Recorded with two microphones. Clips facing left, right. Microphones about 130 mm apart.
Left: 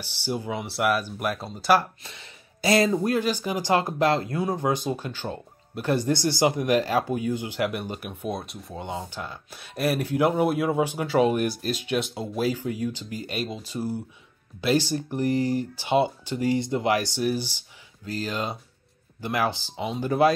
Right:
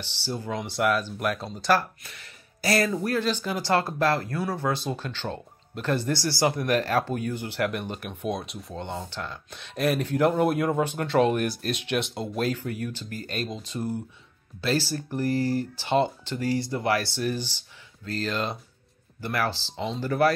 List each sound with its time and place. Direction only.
0.0 s speech: 10° left (ahead or behind)
2.0 s speech: 25° left (ahead or behind)